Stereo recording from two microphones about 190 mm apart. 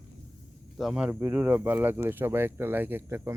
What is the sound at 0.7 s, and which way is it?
Speech, 5° right (ahead or behind).